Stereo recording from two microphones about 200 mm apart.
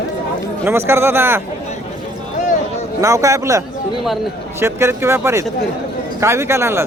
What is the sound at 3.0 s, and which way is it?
A man's voice, 15° right (ahead or behind).